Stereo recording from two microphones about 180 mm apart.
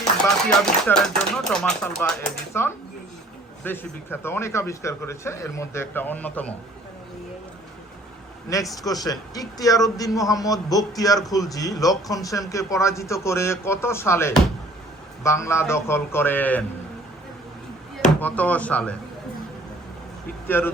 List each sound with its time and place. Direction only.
0.6 s a man's voice: 5° left (ahead or behind)
8.8 s a man's voice: 20° left (ahead or behind)
18.2 s a man's voice: 10° left (ahead or behind)
20.5 s a man's voice: 10° left (ahead or behind)